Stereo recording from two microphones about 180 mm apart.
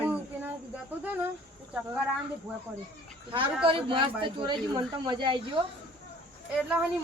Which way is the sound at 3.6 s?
30° right (ahead or behind).